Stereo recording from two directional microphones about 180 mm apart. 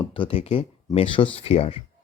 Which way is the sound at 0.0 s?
30° left (ahead or behind).